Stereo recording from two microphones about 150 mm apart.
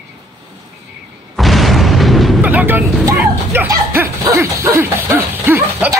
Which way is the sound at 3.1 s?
15° right (ahead or behind).